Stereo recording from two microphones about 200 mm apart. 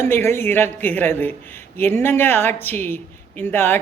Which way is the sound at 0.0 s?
10° left (ahead or behind).